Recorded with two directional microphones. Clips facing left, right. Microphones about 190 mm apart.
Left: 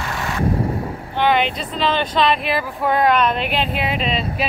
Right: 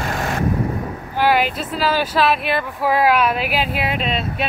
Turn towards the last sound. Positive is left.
turn(degrees=0)  # may be behind; listen again after turning